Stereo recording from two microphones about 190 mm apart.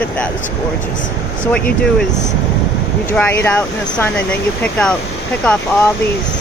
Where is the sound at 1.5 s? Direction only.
5° left (ahead or behind).